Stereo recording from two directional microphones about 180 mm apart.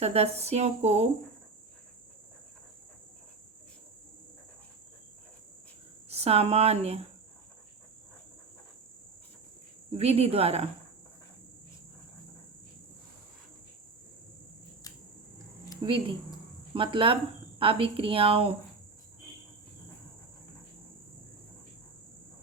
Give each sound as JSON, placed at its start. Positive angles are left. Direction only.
{"t": 0.0, "sound": "speech", "side_deg": -35}
{"t": 6.1, "sound": "speech", "side_deg": -35}
{"t": 10.0, "sound": "speech", "side_deg": -35}
{"t": 15.9, "sound": "speech", "side_deg": -30}